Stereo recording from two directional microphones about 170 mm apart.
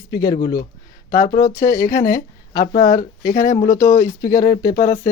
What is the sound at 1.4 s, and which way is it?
Speech, 20° left (ahead or behind).